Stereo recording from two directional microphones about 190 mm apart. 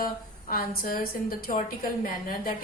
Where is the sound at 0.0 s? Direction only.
50° left (ahead or behind).